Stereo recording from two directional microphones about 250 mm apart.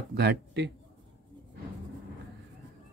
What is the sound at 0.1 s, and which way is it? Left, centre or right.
Speech, right.